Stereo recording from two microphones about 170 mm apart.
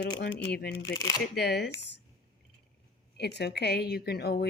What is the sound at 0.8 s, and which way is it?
Speech, 20° left (ahead or behind).